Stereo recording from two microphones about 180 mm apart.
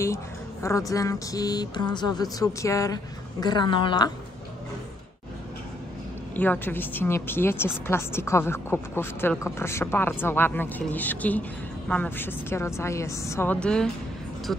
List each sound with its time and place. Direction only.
0.0 s speech: 15° left (ahead or behind)
6.3 s a woman's voice: 10° left (ahead or behind)